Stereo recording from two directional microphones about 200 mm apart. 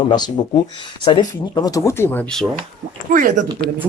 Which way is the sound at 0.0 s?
20° left (ahead or behind).